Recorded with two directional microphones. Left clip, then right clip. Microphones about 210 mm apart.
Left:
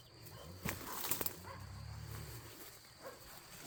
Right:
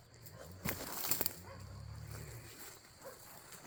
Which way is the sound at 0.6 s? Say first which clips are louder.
Right 1 dB; 50° right (ahead or behind).